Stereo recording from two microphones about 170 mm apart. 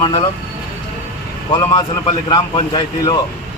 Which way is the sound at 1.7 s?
25° left (ahead or behind).